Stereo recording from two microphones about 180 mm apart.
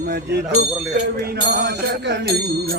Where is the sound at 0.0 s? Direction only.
60° right (ahead or behind).